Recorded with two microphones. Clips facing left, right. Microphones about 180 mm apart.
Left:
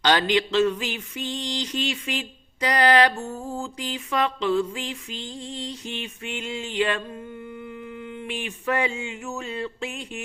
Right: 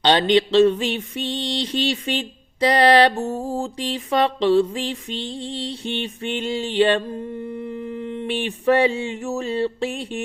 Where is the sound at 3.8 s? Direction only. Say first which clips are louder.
Right 5 dB; 35° right (ahead or behind).